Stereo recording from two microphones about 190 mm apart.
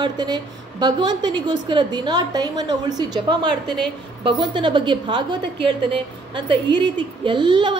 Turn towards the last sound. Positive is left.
turn(degrees=-25)  # may be behind; listen again after turning